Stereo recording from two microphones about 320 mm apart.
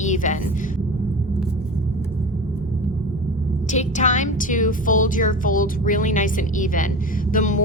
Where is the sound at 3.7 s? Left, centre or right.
Left.